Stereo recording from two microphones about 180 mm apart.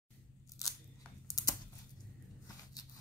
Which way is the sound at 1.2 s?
20° left (ahead or behind).